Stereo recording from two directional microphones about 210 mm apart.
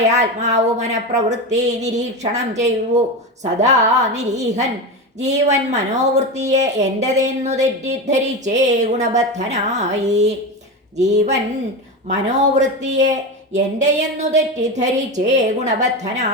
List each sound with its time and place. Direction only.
0.0 s speech: 35° right (ahead or behind)